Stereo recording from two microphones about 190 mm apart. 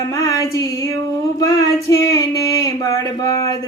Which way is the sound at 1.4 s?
20° left (ahead or behind).